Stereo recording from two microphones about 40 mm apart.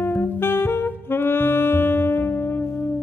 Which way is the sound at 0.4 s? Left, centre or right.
Left.